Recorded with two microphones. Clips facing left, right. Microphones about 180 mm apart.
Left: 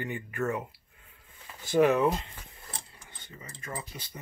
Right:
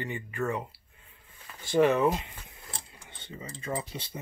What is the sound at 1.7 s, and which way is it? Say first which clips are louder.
Speech: even; centre (ahead or behind).